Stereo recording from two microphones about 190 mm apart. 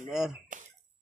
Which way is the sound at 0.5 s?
45° right (ahead or behind).